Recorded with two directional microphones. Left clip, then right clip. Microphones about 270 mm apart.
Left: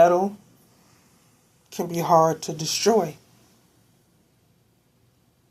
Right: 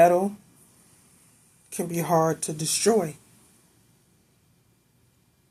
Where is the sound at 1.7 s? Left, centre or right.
Centre.